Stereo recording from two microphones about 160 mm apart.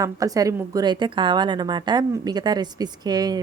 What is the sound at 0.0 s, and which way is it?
A woman's voice, 20° right (ahead or behind).